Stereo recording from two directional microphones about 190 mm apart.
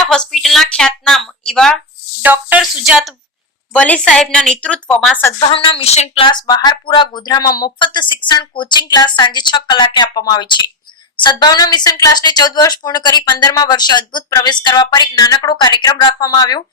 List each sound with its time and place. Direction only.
0.1 s speech: centre (ahead or behind)
2.2 s a woman's voice: 10° right (ahead or behind)
5.5 s speech: 30° left (ahead or behind)